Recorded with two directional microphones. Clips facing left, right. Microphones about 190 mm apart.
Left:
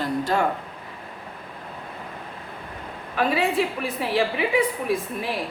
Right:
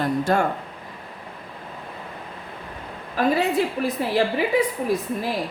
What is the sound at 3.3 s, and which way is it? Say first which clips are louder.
Speech: right 2 dB; 40° right (ahead or behind).